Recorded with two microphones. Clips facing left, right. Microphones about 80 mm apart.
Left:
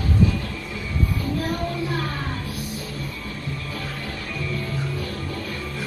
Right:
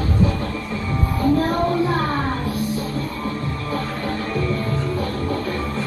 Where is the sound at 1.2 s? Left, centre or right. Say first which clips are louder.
Right 8 dB; right.